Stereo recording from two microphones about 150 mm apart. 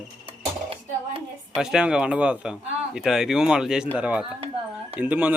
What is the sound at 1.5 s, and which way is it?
A child's voice, 5° right (ahead or behind).